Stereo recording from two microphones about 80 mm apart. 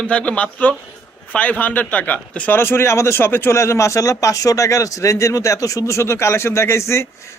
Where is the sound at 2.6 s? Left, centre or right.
Left.